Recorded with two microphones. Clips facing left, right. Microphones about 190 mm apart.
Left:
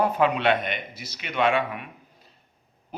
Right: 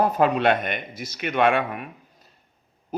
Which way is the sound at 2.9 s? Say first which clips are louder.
Right 9 dB; 40° right (ahead or behind).